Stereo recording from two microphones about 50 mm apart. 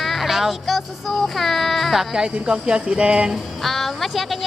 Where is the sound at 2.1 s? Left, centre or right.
Centre.